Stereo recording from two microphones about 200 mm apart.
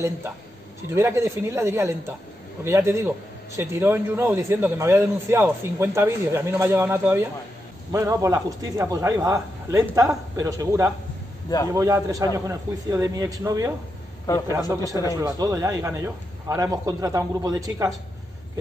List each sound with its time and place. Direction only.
0.9 s a man's voice: 15° right (ahead or behind)
14.9 s a man's voice: 15° right (ahead or behind)